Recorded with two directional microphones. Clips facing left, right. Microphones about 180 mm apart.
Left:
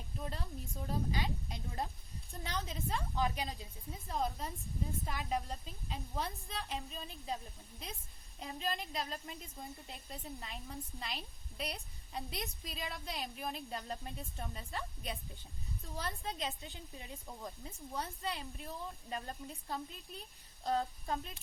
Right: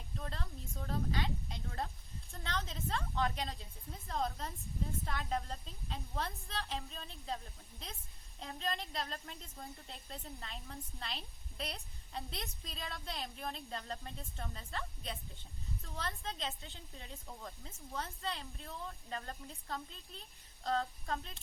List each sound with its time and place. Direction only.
0.2 s speech: 15° left (ahead or behind)
7.3 s a woman's voice: 15° left (ahead or behind)
9.4 s speech: 15° left (ahead or behind)
10.4 s a woman's voice: 5° left (ahead or behind)